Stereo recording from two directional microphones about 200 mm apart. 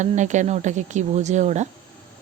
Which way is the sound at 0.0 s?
35° right (ahead or behind).